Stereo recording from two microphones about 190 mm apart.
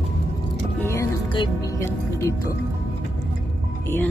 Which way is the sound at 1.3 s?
15° left (ahead or behind).